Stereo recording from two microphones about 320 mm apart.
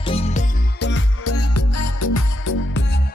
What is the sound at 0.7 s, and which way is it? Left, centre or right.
Music, left.